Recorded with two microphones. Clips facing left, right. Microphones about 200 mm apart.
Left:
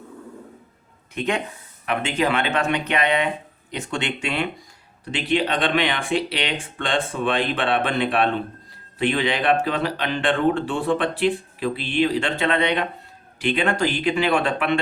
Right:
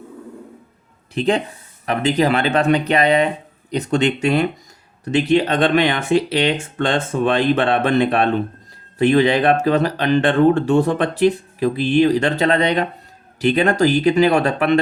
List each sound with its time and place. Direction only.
1.1 s speech: 35° right (ahead or behind)